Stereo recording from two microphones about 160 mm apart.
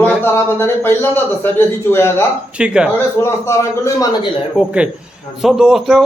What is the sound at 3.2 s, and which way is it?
Speech, 15° left (ahead or behind).